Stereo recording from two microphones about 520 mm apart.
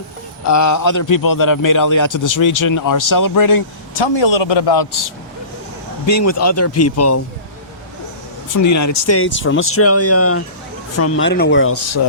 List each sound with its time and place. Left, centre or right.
0.4 s a man's voice: left
3.9 s a man's voice: left
6.1 s speech: left
8.6 s speech: left